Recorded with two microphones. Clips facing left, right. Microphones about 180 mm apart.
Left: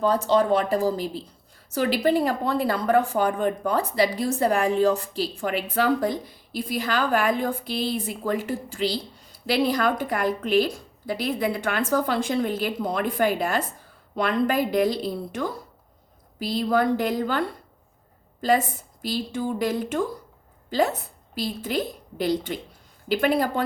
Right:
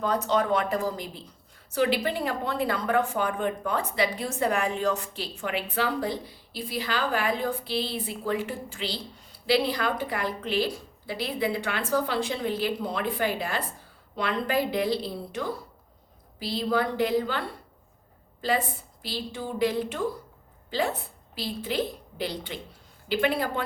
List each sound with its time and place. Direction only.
0.0 s a woman's voice: 30° left (ahead or behind)
19.0 s a woman's voice: 45° left (ahead or behind)